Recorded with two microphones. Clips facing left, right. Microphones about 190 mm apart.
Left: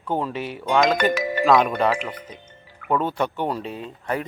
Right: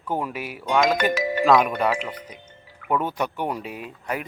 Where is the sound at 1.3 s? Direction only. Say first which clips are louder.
Even; centre (ahead or behind).